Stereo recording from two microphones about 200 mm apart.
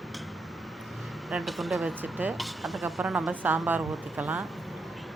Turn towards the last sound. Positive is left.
turn(degrees=0)  # may be behind; listen again after turning